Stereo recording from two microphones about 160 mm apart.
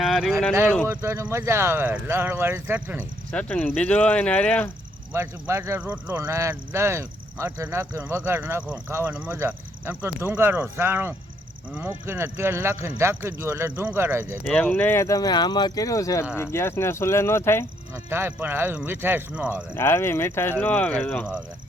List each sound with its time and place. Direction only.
0.0 s speech: centre (ahead or behind)
0.9 s speech: 15° right (ahead or behind)
3.3 s speech: 5° left (ahead or behind)
5.1 s speech: 15° right (ahead or behind)
14.4 s speech: 5° left (ahead or behind)
17.9 s speech: 15° right (ahead or behind)
19.7 s speech: 15° left (ahead or behind)